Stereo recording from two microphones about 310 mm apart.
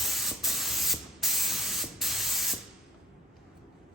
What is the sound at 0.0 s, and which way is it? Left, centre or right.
Spray, centre.